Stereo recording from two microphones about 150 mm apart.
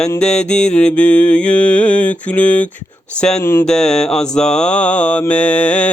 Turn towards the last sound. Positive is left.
turn(degrees=10)  # may be behind; listen again after turning